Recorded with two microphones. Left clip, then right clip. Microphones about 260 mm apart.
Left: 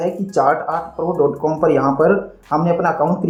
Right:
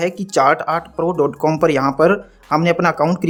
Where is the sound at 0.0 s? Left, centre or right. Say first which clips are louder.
Right 1 dB; right.